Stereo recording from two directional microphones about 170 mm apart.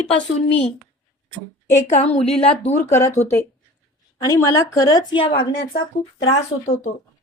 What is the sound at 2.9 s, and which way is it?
Speech, 15° left (ahead or behind).